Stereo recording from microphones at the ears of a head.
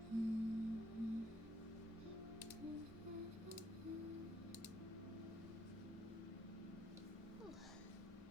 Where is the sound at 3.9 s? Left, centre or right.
Left.